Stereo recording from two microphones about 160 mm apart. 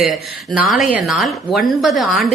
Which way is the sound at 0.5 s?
5° right (ahead or behind).